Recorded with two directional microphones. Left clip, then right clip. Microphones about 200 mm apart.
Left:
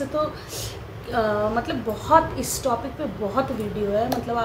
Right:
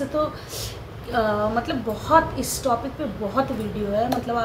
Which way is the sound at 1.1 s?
5° left (ahead or behind).